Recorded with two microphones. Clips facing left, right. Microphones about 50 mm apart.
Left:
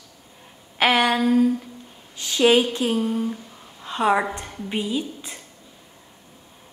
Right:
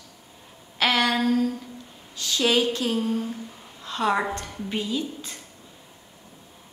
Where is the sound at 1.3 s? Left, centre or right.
Centre.